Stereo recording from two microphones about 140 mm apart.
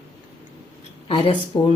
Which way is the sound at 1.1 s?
40° left (ahead or behind).